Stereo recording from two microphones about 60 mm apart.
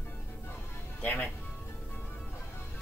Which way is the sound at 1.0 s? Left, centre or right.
Left.